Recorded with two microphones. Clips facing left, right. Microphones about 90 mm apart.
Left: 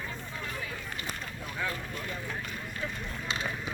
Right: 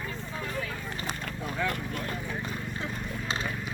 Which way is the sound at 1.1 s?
70° right (ahead or behind).